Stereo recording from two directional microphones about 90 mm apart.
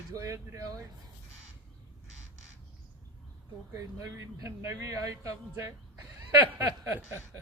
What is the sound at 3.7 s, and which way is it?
A man's voice, 40° right (ahead or behind).